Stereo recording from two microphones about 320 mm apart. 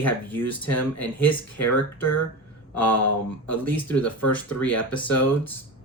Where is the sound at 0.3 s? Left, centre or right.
Centre.